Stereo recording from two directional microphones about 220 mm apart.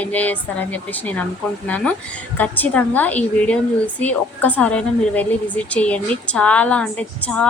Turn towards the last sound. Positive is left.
turn(degrees=5)  # may be behind; listen again after turning